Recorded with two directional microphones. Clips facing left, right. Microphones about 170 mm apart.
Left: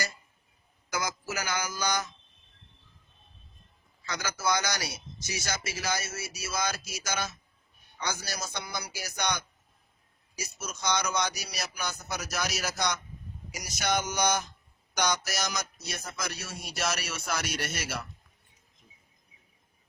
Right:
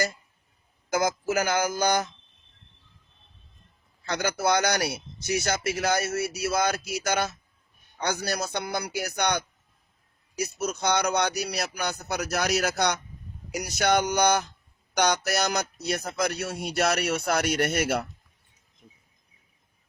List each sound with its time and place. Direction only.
0.9 s a man's voice: 55° right (ahead or behind)
4.0 s speech: 60° right (ahead or behind)